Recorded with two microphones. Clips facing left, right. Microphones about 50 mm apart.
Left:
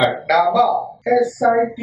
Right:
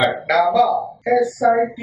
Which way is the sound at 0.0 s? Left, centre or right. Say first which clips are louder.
Left 1 dB; centre.